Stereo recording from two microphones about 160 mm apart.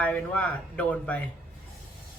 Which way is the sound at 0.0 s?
10° left (ahead or behind).